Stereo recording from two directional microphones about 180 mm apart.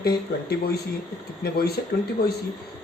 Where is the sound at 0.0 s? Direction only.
60° left (ahead or behind).